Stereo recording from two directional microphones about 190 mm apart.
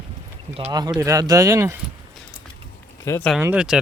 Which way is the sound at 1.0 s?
20° right (ahead or behind).